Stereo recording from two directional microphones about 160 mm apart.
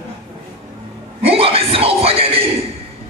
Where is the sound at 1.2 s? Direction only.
35° right (ahead or behind).